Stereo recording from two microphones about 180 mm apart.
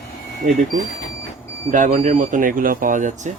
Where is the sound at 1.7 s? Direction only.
45° right (ahead or behind).